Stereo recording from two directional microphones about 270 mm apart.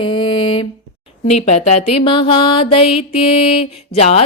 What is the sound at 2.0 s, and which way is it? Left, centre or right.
Mantra, centre.